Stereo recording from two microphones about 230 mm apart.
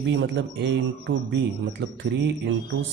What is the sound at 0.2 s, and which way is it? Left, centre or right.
A man's voice, right.